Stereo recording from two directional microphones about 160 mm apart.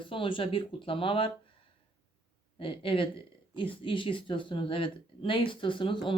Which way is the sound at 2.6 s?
35° left (ahead or behind).